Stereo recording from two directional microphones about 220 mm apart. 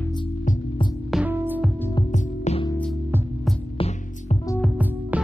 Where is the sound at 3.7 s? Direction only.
30° left (ahead or behind).